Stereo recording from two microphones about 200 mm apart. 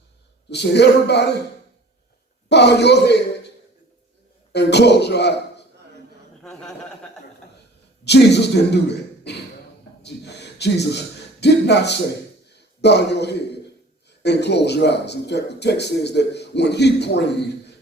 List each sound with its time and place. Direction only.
0.5 s speech: 55° left (ahead or behind)
2.5 s speech: 55° left (ahead or behind)
4.5 s speech: 55° left (ahead or behind)
6.4 s a sound: 5° left (ahead or behind)
8.0 s a man's voice: 55° left (ahead or behind)
10.0 s a sound: 55° left (ahead or behind)
14.1 s speech: 60° left (ahead or behind)